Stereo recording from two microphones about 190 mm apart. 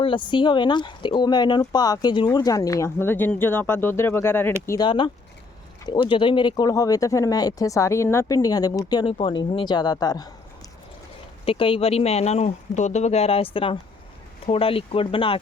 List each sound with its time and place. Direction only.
0.0 s speech: 25° left (ahead or behind)
4.9 s speech: 25° left (ahead or behind)
11.4 s speech: 30° left (ahead or behind)